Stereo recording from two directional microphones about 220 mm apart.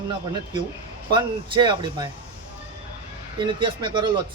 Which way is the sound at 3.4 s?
20° right (ahead or behind).